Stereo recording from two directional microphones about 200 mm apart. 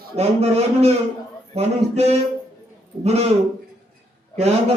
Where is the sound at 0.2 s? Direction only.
30° right (ahead or behind).